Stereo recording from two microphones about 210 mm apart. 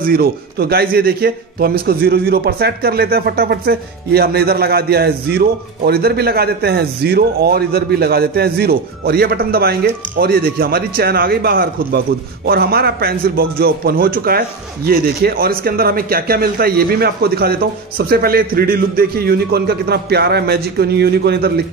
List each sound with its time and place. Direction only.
0.0 s a man's voice: 45° right (ahead or behind)